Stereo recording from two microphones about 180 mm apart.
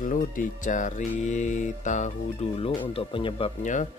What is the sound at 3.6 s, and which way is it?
Speech, 45° left (ahead or behind).